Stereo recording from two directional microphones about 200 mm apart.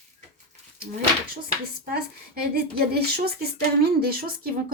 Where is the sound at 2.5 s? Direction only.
55° right (ahead or behind).